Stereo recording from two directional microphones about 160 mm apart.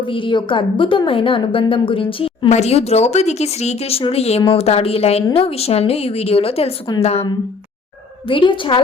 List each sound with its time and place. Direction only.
0.0 s speech: 30° left (ahead or behind)
8.3 s speech: 30° left (ahead or behind)